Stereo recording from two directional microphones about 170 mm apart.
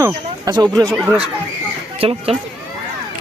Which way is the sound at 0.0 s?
20° right (ahead or behind).